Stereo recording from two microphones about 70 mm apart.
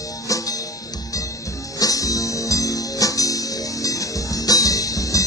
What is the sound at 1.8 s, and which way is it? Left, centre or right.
Music, left.